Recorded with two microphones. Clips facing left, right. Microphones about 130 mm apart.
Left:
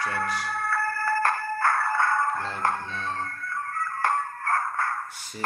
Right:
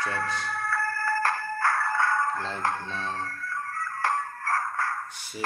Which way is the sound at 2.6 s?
55° left (ahead or behind).